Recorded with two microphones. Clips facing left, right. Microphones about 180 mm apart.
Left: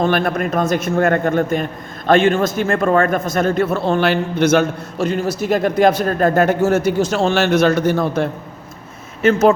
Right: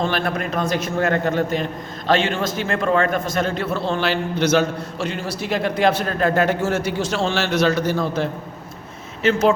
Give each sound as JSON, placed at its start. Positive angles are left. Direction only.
{"t": 0.0, "sound": "a man's voice", "side_deg": 50}
{"t": 9.2, "sound": "a man's voice", "side_deg": 45}